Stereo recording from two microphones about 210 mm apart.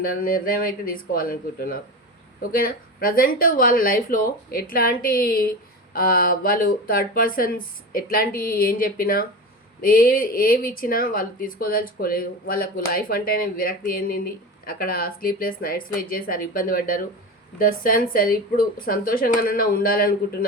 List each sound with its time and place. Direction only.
0.0 s speech: 45° left (ahead or behind)